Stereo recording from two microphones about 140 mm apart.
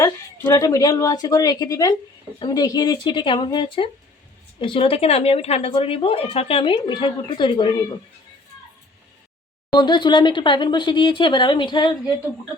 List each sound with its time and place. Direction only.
0.0 s a woman's voice: 25° left (ahead or behind)
9.7 s a woman's voice: 30° left (ahead or behind)